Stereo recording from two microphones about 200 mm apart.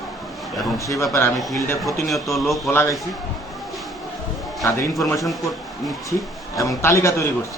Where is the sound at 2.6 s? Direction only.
10° left (ahead or behind).